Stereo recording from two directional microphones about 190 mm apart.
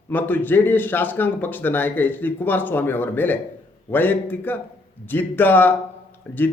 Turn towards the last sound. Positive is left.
turn(degrees=10)  # may be behind; listen again after turning